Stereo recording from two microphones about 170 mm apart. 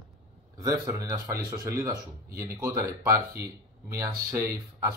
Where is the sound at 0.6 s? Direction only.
20° right (ahead or behind).